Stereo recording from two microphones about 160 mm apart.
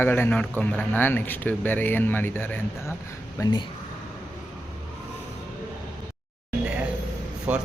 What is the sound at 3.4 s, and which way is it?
Speech, 25° left (ahead or behind).